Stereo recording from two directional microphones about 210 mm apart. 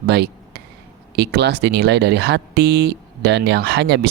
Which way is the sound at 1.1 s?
50° right (ahead or behind).